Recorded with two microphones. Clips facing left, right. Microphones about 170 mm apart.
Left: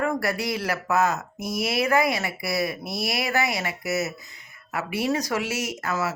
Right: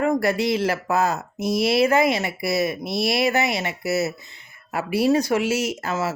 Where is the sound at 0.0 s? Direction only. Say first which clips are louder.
Right 5 dB; 25° right (ahead or behind).